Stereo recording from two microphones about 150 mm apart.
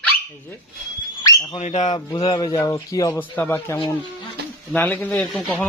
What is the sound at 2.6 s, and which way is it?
Speech, 20° left (ahead or behind).